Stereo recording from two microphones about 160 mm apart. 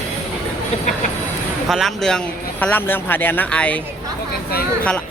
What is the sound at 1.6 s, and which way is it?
A man's voice, centre (ahead or behind).